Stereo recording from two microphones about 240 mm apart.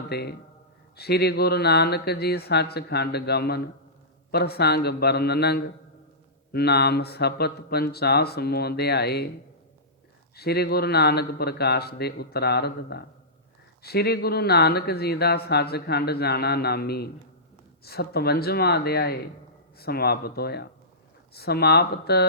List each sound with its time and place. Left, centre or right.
0.1 s speech: left
10.3 s speech: left